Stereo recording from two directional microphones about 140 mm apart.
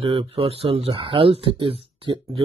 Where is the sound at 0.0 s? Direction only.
40° right (ahead or behind).